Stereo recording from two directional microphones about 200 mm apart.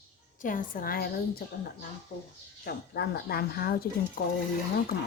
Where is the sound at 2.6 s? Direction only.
50° left (ahead or behind).